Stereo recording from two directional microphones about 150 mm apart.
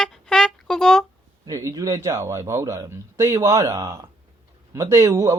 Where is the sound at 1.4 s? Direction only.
20° right (ahead or behind).